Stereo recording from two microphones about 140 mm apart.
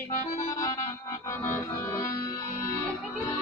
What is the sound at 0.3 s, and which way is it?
Accordion, 25° left (ahead or behind).